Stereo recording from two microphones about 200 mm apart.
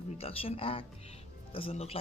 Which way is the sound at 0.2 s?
30° left (ahead or behind).